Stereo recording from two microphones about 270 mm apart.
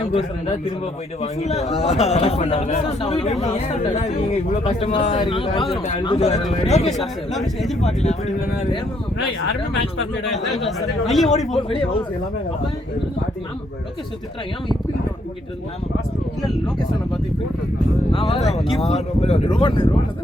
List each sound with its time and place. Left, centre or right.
0.1 s a man's voice: left
4.6 s a man's voice: left
6.9 s speech: centre
7.8 s a man's voice: left
10.3 s speech: centre
11.7 s a man's voice: centre
18.1 s a man's voice: left